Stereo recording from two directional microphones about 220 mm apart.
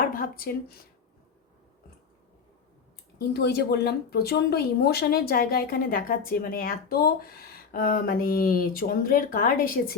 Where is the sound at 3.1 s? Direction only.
45° left (ahead or behind).